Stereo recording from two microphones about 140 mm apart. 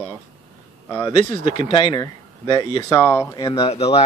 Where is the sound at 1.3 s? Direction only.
60° right (ahead or behind).